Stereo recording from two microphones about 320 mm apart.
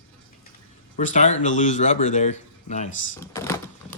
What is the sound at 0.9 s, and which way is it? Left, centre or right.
Speech, left.